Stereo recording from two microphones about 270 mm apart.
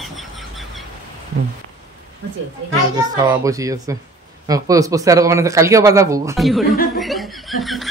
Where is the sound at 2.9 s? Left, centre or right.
Centre.